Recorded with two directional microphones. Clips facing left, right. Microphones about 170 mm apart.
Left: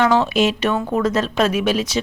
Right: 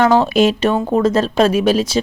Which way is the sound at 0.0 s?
40° right (ahead or behind).